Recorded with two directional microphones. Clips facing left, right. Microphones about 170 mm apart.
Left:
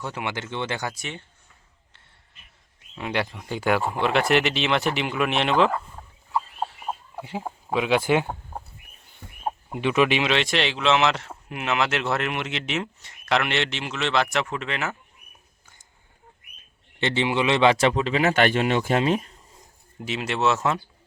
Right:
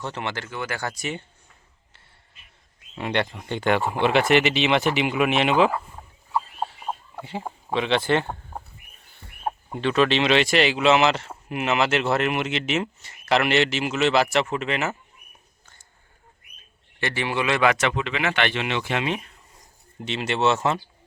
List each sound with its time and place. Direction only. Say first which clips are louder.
0.0 s speech: even; 10° left (ahead or behind); by 0.9 s 25° left (ahead or behind)
0.9 s speech: right 5 dB; 5° right (ahead or behind)
3.0 s speech: right 2 dB; centre (ahead or behind)
6.6 s chicken: even; 5° left (ahead or behind)
9.7 s speech: right 1 dB; 15° left (ahead or behind)
10.2 s speech: right 4 dB; centre (ahead or behind)
17.0 s speech: left 3 dB; 20° left (ahead or behind); by 19.2 s 40° left (ahead or behind)
20.0 s speech: right 1 dB; centre (ahead or behind)